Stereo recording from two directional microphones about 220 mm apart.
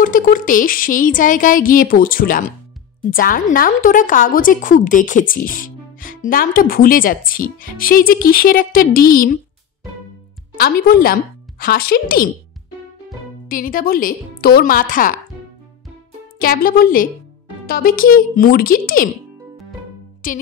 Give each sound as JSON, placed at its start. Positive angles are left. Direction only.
{"t": 0.0, "sound": "a woman's voice", "side_deg": 40}
{"t": 10.6, "sound": "speech", "side_deg": 45}
{"t": 13.5, "sound": "a woman's voice", "side_deg": 40}
{"t": 16.3, "sound": "a woman's voice", "side_deg": 40}
{"t": 20.2, "sound": "a woman's voice", "side_deg": 35}